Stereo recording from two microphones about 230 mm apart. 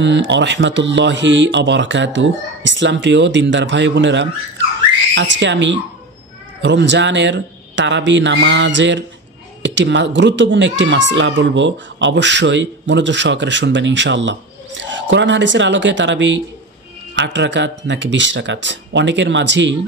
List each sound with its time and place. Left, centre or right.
0.0 s speech: right